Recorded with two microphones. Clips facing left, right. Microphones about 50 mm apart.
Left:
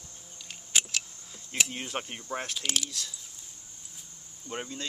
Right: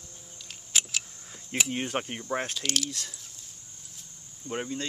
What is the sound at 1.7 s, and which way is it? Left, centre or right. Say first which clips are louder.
Speech: right 5 dB; right.